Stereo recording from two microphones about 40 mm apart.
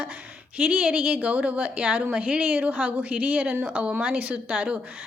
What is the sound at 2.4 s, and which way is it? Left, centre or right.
A woman's voice, right.